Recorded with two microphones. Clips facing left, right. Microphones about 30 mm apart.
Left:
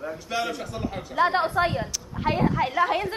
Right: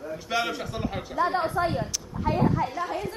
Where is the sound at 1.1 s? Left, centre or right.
Left.